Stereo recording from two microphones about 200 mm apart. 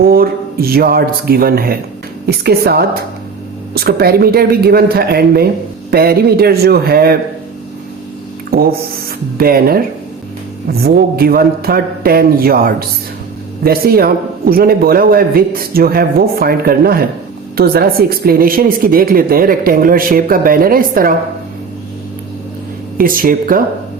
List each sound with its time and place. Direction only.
0.0 s speech: 50° right (ahead or behind)
9.4 s speech: 50° right (ahead or behind)
23.0 s speech: 45° right (ahead or behind)